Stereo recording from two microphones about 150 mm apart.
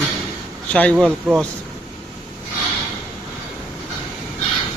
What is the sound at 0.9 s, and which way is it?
Speech, centre (ahead or behind).